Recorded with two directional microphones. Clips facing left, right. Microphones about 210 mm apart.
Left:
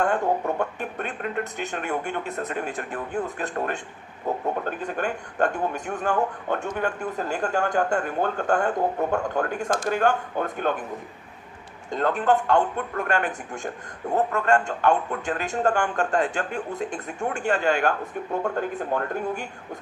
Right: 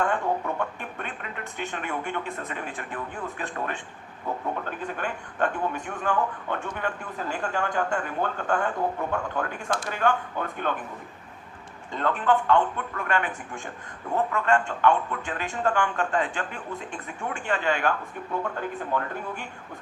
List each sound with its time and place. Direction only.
0.0 s a man's voice: 45° left (ahead or behind)
4.9 s a man's voice: 45° left (ahead or behind)
11.9 s a man's voice: 40° left (ahead or behind)